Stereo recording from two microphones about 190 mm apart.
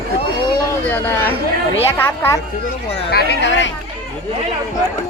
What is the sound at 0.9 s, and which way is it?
A woman's voice, 10° left (ahead or behind).